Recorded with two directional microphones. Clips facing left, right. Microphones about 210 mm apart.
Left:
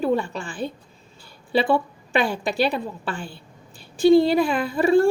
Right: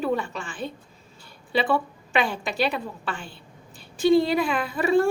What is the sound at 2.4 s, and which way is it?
A woman's voice, 30° left (ahead or behind).